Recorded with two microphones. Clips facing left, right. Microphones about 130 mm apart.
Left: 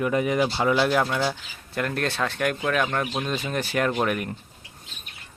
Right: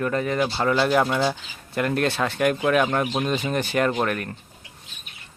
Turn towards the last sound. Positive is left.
turn(degrees=10)  # may be behind; listen again after turning